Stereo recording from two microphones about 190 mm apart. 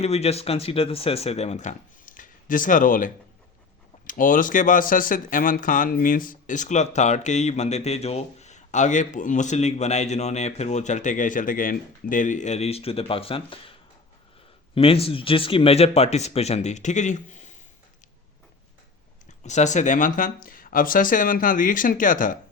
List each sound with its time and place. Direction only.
0.0 s speech: 35° left (ahead or behind)
14.8 s speech: 30° left (ahead or behind)
19.4 s speech: 40° left (ahead or behind)